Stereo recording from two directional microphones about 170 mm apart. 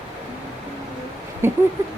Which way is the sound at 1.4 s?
15° right (ahead or behind).